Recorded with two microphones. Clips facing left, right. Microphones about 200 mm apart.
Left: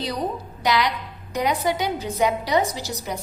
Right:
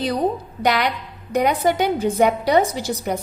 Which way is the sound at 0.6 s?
55° right (ahead or behind).